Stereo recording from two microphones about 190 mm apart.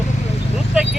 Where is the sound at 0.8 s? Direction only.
5° right (ahead or behind).